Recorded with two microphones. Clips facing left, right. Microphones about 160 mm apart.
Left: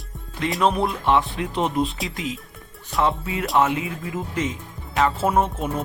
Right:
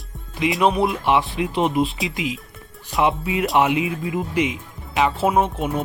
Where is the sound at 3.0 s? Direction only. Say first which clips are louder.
Right 3 dB; 15° right (ahead or behind).